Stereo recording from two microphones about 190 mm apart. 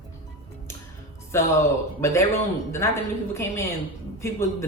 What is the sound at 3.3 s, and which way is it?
Speech, 15° left (ahead or behind).